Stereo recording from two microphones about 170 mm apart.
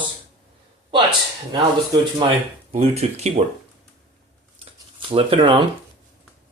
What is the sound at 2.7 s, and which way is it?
Speech, 40° right (ahead or behind).